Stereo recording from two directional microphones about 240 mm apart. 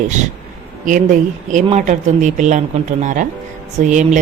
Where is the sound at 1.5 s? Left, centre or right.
Right.